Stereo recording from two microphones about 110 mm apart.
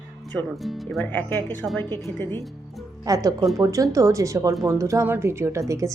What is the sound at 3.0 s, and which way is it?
A woman's voice, 35° right (ahead or behind).